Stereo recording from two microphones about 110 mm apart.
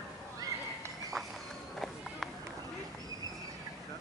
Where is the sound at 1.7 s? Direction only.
Centre (ahead or behind).